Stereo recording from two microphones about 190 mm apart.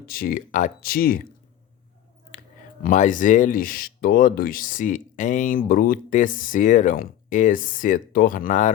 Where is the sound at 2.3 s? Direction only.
45° left (ahead or behind).